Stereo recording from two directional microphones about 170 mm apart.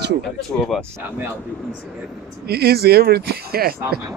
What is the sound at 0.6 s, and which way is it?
Speech, 5° left (ahead or behind).